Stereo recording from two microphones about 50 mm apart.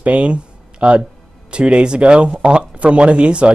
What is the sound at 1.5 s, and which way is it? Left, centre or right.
Speech, centre.